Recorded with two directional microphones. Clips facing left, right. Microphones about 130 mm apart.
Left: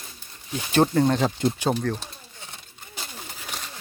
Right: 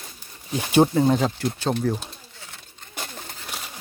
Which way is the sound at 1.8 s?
5° right (ahead or behind).